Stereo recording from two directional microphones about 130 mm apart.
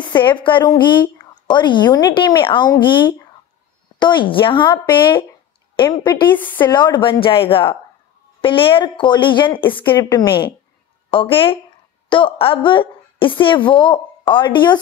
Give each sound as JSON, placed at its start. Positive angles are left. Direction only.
{"t": 0.1, "sound": "a woman's voice", "side_deg": 35}
{"t": 6.3, "sound": "a woman's voice", "side_deg": 15}
{"t": 6.7, "sound": "a woman's voice", "side_deg": 35}